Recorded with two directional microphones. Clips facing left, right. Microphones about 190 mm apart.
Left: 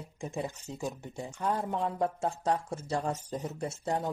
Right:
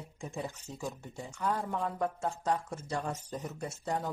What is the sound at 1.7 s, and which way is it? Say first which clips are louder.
Speech: left 3 dB; 25° left (ahead or behind).